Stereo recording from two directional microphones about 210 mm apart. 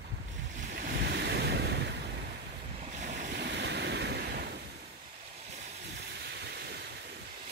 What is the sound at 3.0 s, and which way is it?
Waves, 45° right (ahead or behind).